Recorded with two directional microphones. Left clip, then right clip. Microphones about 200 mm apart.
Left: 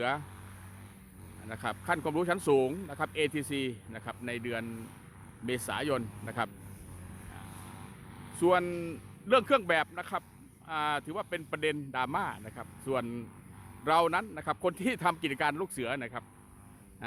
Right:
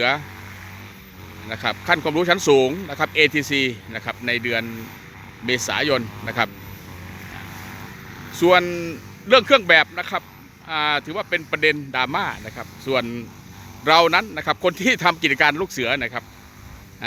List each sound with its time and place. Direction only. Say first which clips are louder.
1.5 s speech: right 12 dB; centre (ahead or behind)
7.5 s vehicle: right 13 dB; 45° right (ahead or behind)
8.4 s speech: right 11 dB; 5° left (ahead or behind)